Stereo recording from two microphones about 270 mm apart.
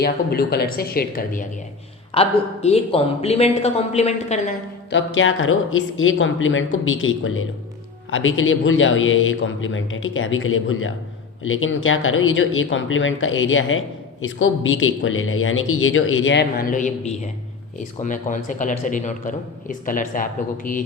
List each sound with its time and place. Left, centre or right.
0.0 s a man's voice: left
4.9 s a man's voice: left